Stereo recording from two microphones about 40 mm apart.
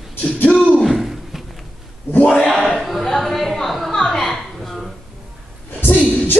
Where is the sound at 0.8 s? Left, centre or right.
Centre.